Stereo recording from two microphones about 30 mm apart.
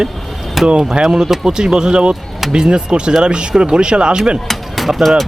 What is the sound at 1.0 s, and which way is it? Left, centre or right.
Speech, right.